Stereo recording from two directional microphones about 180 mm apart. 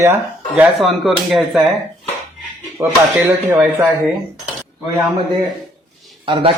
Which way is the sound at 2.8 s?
10° right (ahead or behind).